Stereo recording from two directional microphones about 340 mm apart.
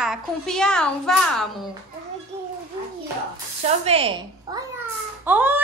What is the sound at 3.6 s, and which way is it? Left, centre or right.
A woman's voice, centre.